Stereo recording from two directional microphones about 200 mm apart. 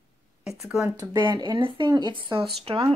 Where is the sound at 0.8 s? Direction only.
20° right (ahead or behind).